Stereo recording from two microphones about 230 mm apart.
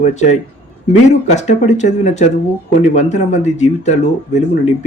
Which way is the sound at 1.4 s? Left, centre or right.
Left.